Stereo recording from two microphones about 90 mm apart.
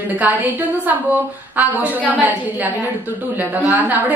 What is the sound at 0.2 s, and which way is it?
A woman's voice, 20° right (ahead or behind).